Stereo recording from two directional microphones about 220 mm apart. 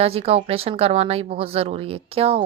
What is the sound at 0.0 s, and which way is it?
A woman's voice, 25° right (ahead or behind).